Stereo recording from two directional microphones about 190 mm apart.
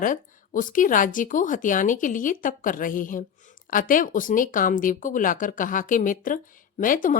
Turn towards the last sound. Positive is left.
turn(degrees=45)  # may be behind; listen again after turning